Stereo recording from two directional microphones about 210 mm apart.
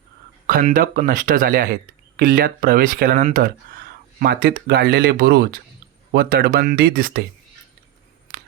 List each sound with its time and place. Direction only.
0.4 s speech: 40° right (ahead or behind)